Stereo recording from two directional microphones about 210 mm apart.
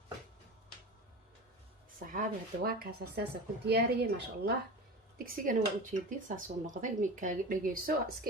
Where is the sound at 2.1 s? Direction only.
45° right (ahead or behind).